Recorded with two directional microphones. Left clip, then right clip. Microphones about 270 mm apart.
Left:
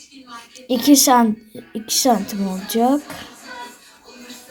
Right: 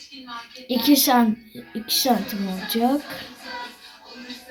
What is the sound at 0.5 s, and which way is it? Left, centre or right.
A woman's voice, left.